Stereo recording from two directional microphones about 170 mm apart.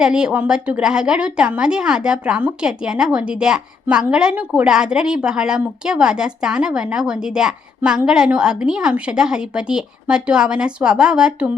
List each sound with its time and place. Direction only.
0.0 s a woman's voice: 5° right (ahead or behind)